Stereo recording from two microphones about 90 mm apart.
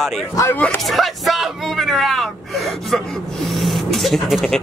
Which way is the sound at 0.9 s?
Centre (ahead or behind).